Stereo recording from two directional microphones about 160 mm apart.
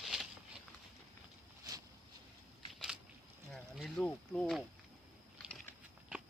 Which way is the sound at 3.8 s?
5° left (ahead or behind).